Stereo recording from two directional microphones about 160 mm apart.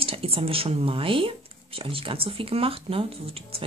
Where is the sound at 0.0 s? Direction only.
35° right (ahead or behind).